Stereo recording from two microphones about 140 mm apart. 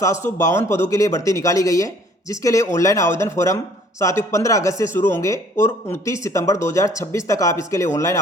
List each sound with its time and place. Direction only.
0.4 s speech: 20° left (ahead or behind)